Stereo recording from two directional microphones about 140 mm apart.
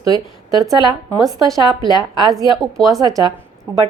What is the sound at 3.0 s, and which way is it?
Speech, 25° right (ahead or behind).